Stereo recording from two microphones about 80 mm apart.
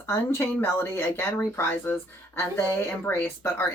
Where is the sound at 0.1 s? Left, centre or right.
Left.